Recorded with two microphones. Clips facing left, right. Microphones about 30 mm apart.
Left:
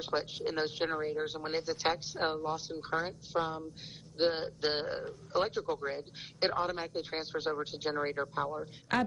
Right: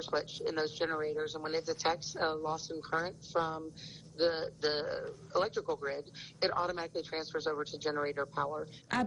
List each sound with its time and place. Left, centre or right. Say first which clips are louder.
0.0 s speech: left 1 dB; centre